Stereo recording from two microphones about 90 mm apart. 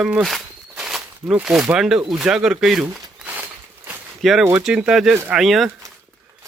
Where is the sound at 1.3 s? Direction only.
10° right (ahead or behind).